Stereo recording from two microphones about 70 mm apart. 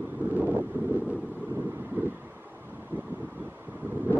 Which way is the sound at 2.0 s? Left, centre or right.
Right.